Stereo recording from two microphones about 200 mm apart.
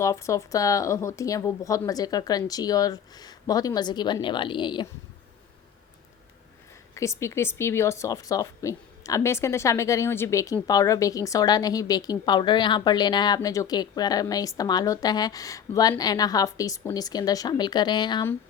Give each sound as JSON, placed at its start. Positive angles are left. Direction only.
{"t": 0.0, "sound": "speech", "side_deg": 15}
{"t": 6.9, "sound": "speech", "side_deg": 15}